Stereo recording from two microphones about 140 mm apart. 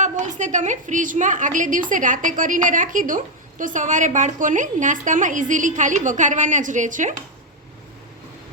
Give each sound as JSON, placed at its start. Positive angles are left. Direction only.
{"t": 0.0, "sound": "a woman's voice", "side_deg": -60}